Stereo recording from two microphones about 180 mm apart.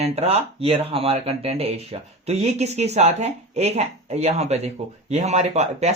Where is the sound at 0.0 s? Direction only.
35° right (ahead or behind).